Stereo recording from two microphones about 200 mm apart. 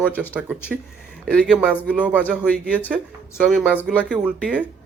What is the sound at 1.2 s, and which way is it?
Speech, centre (ahead or behind).